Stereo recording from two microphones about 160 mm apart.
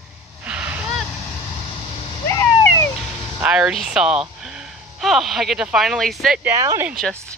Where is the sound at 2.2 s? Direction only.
15° left (ahead or behind).